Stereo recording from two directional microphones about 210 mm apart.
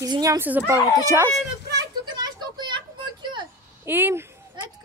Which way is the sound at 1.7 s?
20° right (ahead or behind).